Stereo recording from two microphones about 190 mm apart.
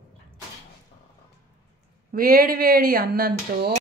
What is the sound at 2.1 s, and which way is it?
Speech, 50° right (ahead or behind).